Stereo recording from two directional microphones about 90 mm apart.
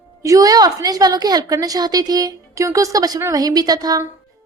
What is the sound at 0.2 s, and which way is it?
A woman's voice, 40° right (ahead or behind).